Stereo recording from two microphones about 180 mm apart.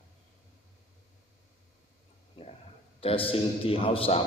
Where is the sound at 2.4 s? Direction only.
30° left (ahead or behind).